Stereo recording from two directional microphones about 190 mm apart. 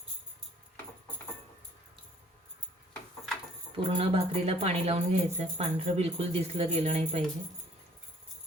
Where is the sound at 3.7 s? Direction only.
30° right (ahead or behind).